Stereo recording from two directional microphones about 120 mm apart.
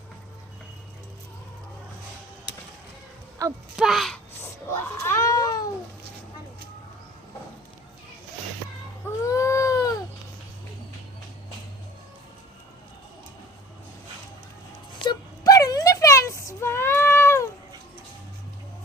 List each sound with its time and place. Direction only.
3.4 s speech: 30° right (ahead or behind)
3.8 s speech: centre (ahead or behind)
4.7 s cat: 20° left (ahead or behind)
9.0 s baby cry: 25° left (ahead or behind)
15.0 s a sound: 35° left (ahead or behind)